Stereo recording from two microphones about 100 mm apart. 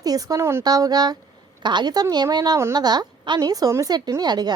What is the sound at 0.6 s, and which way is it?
A woman's voice, 40° right (ahead or behind).